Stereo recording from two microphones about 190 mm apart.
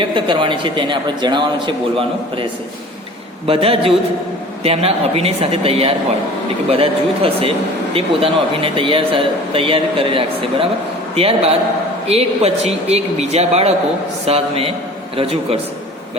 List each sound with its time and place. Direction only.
0.0 s a man's voice: 25° right (ahead or behind)